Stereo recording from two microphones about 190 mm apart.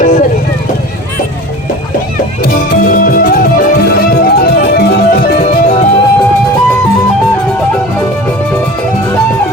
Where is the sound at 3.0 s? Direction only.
50° left (ahead or behind).